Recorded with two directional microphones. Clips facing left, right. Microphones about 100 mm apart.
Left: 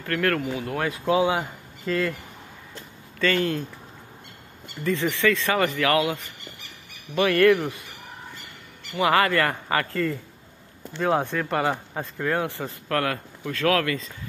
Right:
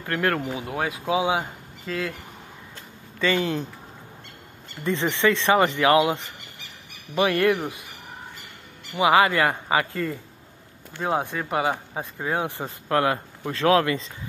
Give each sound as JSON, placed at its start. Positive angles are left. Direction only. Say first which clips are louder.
{"t": 0.0, "sound": "speech", "louder": "even", "side_deg": -20}
{"t": 3.2, "sound": "speech", "louder": "even", "side_deg": -15}
{"t": 4.8, "sound": "speech", "louder": "right 1 dB", "side_deg": -25}
{"t": 8.9, "sound": "speech", "louder": "right 2 dB", "side_deg": -15}